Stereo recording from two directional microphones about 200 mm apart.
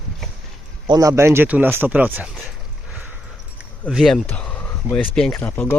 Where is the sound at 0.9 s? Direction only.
15° right (ahead or behind).